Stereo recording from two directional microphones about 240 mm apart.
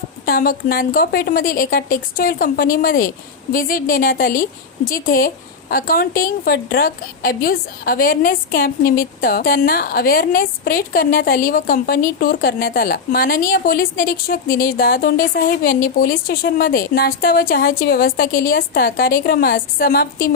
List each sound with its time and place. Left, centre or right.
0.3 s speech: left